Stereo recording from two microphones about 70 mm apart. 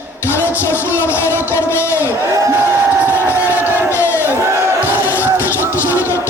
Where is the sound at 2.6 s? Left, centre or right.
Right.